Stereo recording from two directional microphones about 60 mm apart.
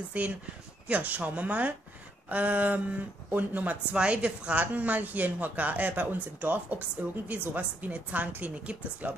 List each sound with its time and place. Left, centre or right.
0.2 s a woman's voice: right
4.0 s a woman's voice: centre